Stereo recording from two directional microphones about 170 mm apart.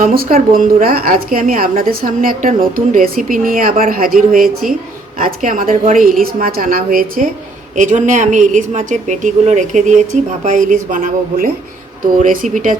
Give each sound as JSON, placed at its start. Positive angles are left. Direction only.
{"t": 0.0, "sound": "a woman's voice", "side_deg": -60}